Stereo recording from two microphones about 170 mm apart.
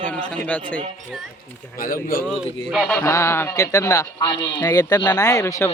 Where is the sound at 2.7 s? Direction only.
5° left (ahead or behind).